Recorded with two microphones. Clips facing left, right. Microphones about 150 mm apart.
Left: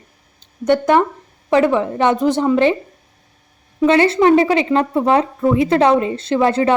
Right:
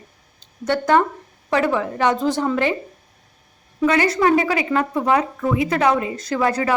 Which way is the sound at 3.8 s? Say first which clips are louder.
Left 5 dB; 25° left (ahead or behind).